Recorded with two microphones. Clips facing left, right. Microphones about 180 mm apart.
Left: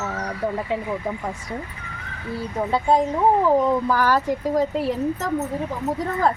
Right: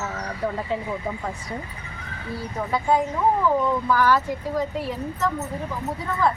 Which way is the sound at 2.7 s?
30° left (ahead or behind).